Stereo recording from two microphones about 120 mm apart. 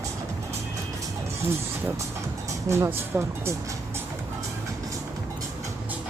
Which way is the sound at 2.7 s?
20° right (ahead or behind).